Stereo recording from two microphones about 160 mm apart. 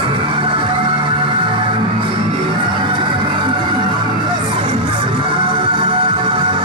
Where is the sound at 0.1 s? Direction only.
35° right (ahead or behind).